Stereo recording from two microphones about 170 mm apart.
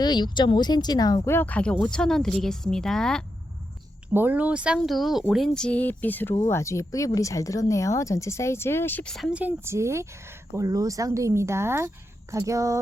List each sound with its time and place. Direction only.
0.0 s speech: 25° left (ahead or behind); by 3.2 s 5° left (ahead or behind)
4.1 s speech: 10° right (ahead or behind)